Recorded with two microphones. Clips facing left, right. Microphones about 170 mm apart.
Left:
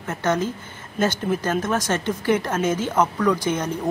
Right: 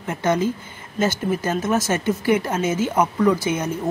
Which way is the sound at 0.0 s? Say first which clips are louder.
Right 2 dB; 10° right (ahead or behind).